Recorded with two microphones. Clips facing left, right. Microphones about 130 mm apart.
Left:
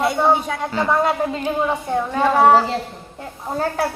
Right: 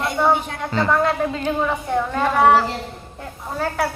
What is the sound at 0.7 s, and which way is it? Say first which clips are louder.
A child's voice: even; 10° left (ahead or behind).